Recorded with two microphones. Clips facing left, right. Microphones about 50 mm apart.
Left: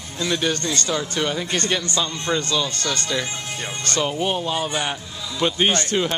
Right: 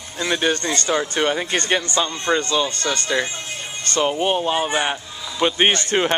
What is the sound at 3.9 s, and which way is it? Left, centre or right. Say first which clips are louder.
A man's voice: right 4 dB; right.